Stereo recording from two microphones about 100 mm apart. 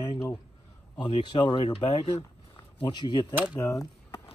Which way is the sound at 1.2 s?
50° left (ahead or behind).